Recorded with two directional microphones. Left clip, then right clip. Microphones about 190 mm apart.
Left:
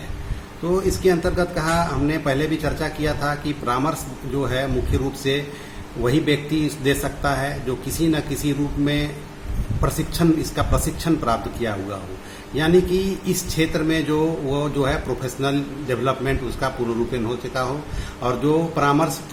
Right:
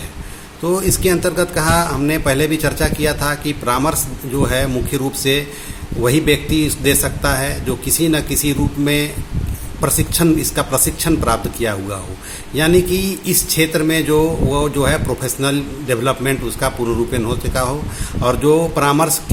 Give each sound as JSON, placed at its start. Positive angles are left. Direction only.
{"t": 0.7, "sound": "speech", "side_deg": -40}